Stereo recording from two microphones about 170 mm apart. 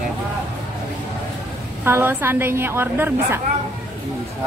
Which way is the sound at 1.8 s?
10° right (ahead or behind).